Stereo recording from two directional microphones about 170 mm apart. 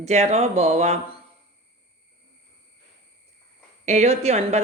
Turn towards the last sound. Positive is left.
turn(degrees=-40)  # may be behind; listen again after turning